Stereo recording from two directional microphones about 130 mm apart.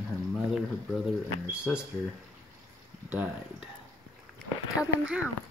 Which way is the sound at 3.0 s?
10° right (ahead or behind).